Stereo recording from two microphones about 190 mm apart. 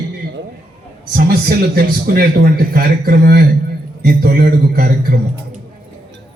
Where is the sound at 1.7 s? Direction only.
55° right (ahead or behind).